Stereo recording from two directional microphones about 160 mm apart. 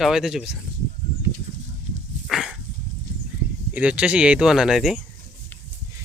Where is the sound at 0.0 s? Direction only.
5° right (ahead or behind).